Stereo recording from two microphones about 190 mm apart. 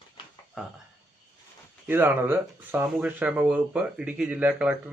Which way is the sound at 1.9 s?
10° right (ahead or behind).